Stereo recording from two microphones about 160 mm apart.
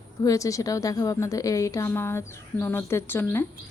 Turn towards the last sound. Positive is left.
turn(degrees=15)  # may be behind; listen again after turning